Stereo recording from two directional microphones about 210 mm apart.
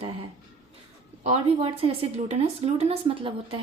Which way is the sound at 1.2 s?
25° right (ahead or behind).